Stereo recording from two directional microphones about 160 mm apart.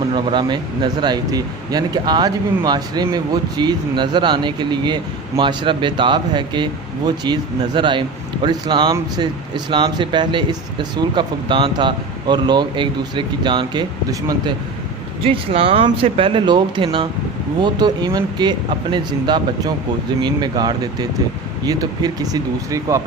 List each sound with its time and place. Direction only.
0.1 s speech: 30° right (ahead or behind)